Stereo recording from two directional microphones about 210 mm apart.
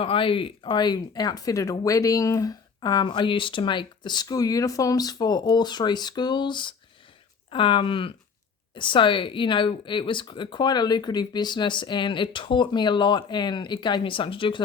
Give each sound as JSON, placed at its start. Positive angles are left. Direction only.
{"t": 0.0, "sound": "speech", "side_deg": 25}